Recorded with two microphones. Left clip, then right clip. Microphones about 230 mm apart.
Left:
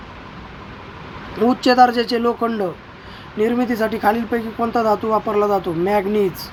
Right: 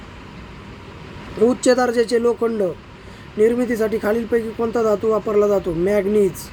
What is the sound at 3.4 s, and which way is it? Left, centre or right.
Speech, centre.